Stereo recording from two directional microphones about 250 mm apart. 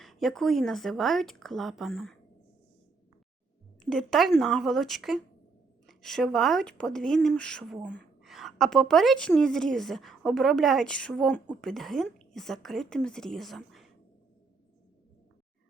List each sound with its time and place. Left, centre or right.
0.0 s a woman's voice: centre
3.8 s a woman's voice: centre